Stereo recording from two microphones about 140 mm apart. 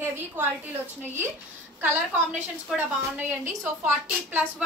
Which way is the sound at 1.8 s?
15° right (ahead or behind).